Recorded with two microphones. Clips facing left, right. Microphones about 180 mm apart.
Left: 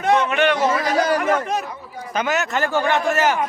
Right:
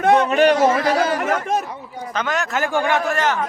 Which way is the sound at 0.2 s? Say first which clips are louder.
Right 4 dB; 40° right (ahead or behind).